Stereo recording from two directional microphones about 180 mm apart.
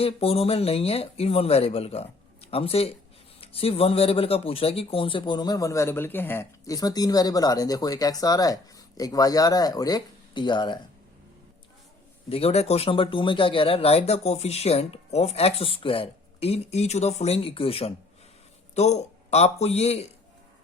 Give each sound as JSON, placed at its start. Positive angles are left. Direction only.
{"t": 0.0, "sound": "speech", "side_deg": 35}
{"t": 12.3, "sound": "speech", "side_deg": 35}